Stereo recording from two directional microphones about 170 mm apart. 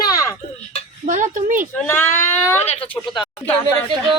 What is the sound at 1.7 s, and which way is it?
Speech, 15° left (ahead or behind).